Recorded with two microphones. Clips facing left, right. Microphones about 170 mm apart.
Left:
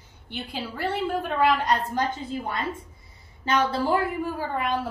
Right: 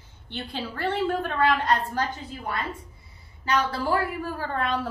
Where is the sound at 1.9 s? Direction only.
25° left (ahead or behind).